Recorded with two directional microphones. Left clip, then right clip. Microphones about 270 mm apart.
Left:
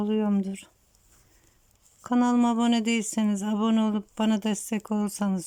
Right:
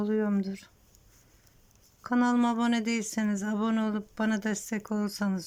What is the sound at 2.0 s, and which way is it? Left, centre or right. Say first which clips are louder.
Speech: left 3 dB; centre.